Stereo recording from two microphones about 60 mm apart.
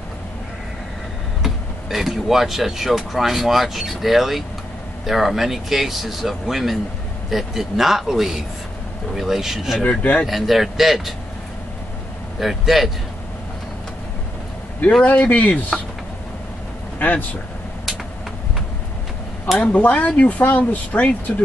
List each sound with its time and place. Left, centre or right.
1.4 s speech: centre
9.8 s speech: left
10.2 s speech: centre
12.4 s speech: centre
15.0 s speech: left
17.0 s speech: left
19.6 s speech: left